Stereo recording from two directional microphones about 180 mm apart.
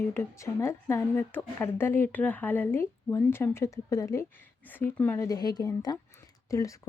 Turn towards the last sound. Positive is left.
turn(degrees=20)  # may be behind; listen again after turning